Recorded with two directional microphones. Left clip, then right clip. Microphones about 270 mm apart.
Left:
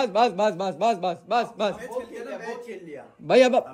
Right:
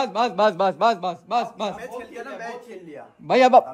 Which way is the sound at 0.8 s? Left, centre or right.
Centre.